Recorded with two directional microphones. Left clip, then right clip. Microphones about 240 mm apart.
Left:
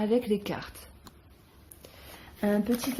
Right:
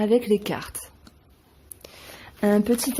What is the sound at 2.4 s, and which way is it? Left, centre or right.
Speech, right.